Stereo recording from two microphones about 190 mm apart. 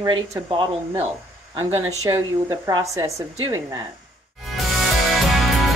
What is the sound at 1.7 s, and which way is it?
A woman's voice, 15° right (ahead or behind).